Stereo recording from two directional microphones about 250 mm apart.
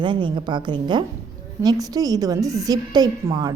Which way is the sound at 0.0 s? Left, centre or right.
Centre.